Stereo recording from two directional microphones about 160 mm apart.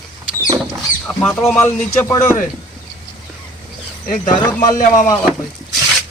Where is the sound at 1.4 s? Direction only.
10° left (ahead or behind).